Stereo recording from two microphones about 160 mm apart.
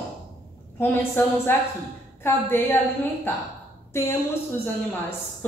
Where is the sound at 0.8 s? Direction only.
15° left (ahead or behind).